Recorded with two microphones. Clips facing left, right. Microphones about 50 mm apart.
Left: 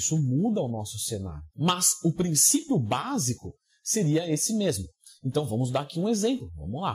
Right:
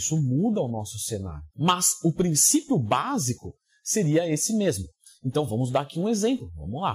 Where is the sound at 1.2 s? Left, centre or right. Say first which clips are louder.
Right 3 dB; right.